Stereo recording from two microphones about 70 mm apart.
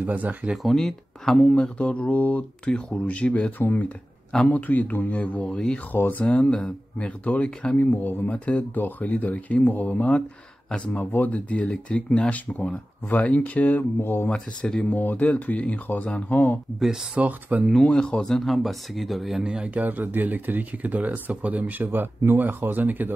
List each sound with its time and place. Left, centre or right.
0.0 s speech: right
0.6 s speech: centre
1.3 s speech: centre
5.9 s speech: left
7.7 s speech: left
14.3 s speech: centre
15.0 s speech: left
16.8 s speech: centre
17.2 s speech: right
17.7 s speech: centre
19.4 s speech: centre